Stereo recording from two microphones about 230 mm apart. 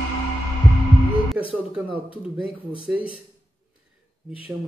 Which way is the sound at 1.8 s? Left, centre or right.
Left.